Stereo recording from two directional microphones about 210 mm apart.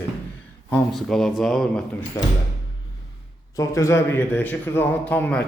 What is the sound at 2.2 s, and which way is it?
Speech, 15° left (ahead or behind).